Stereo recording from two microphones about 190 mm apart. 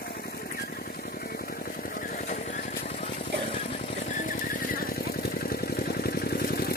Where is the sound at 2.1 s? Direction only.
45° left (ahead or behind).